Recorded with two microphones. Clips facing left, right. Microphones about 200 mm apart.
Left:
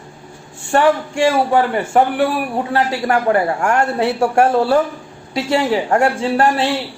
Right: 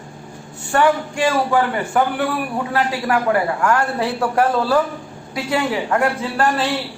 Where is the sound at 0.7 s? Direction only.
25° left (ahead or behind).